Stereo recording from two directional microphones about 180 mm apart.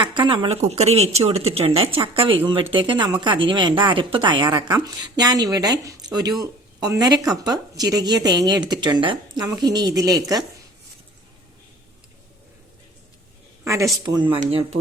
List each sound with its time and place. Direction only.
0.1 s speech: 25° right (ahead or behind)
14.0 s speech: 25° right (ahead or behind)